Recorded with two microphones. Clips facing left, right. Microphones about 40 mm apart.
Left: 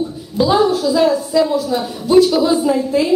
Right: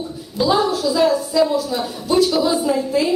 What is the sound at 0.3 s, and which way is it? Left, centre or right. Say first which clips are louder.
A woman's voice: left 4 dB; centre.